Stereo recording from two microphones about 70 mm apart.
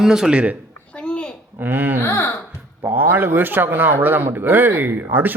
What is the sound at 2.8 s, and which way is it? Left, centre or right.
A man's voice, right.